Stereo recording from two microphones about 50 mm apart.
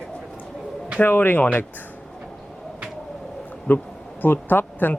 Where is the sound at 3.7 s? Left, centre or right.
Left.